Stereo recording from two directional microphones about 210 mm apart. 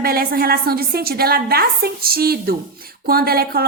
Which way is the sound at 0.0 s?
45° right (ahead or behind).